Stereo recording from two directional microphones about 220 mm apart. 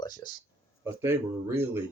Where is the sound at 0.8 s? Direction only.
10° right (ahead or behind).